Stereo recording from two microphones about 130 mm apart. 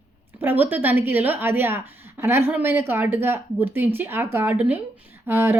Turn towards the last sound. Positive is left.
turn(degrees=-15)  # may be behind; listen again after turning